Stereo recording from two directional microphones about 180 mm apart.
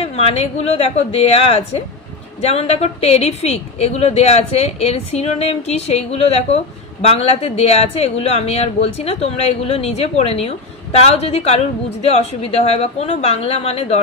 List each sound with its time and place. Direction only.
0.0 s a woman's voice: 35° left (ahead or behind)